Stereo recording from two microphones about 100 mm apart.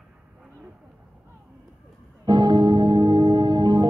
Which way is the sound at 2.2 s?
45° right (ahead or behind).